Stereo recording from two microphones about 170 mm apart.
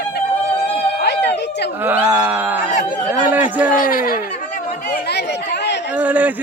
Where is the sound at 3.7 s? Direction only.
55° left (ahead or behind).